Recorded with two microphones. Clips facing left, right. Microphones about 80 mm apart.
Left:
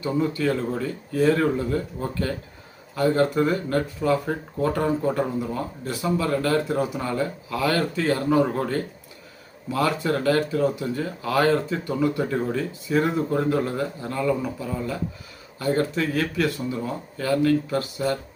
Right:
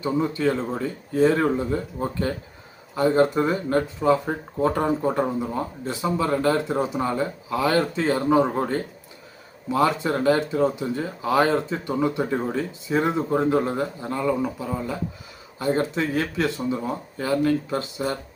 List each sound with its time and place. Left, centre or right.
0.0 s speech: right